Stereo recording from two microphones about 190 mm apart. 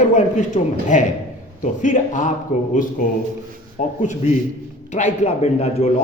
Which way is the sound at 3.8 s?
40° left (ahead or behind).